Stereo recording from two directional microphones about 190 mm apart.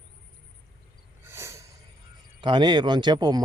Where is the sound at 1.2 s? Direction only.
15° right (ahead or behind).